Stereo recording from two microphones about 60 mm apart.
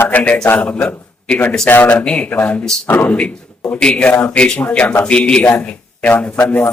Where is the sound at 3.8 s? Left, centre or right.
Left.